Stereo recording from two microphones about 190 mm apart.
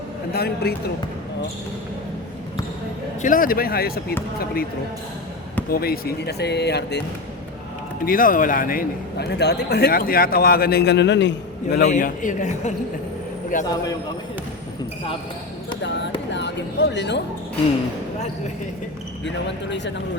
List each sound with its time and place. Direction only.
0.3 s speech: 55° left (ahead or behind)
3.2 s a man's voice: 45° left (ahead or behind)
5.7 s speech: 55° left (ahead or behind)
8.0 s a man's voice: 45° left (ahead or behind); by 11.8 s 70° left (ahead or behind)
11.8 s a man's voice: 40° left (ahead or behind)
15.8 s a sound: 70° left (ahead or behind)